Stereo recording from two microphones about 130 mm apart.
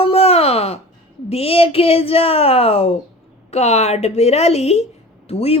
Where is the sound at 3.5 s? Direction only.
55° left (ahead or behind).